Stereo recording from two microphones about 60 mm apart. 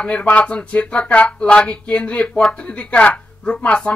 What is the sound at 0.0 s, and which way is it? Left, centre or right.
Speech, left.